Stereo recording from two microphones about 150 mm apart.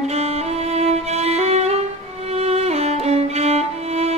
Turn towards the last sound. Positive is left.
turn(degrees=-45)  # may be behind; listen again after turning